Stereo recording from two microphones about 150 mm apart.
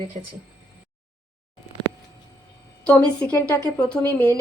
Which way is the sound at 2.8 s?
10° left (ahead or behind).